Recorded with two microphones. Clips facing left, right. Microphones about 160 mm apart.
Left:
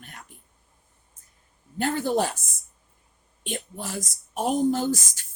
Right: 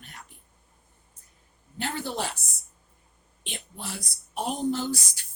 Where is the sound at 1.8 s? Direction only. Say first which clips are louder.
Left 7 dB; 45° left (ahead or behind).